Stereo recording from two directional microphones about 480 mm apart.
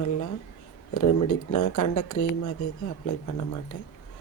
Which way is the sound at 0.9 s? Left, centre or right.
Left.